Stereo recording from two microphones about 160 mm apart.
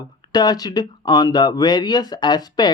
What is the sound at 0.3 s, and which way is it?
Speech, 25° left (ahead or behind).